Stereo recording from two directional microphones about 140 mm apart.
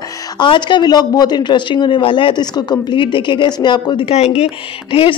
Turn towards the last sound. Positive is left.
turn(degrees=40)  # may be behind; listen again after turning